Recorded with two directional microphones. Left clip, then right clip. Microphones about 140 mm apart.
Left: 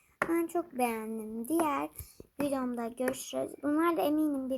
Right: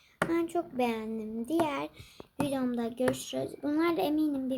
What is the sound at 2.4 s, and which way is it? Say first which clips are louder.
A child's voice: right 1 dB; centre (ahead or behind).